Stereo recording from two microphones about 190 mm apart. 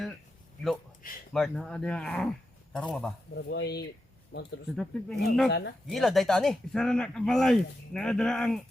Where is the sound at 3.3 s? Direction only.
60° left (ahead or behind).